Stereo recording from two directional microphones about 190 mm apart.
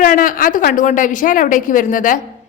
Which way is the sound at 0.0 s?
45° left (ahead or behind).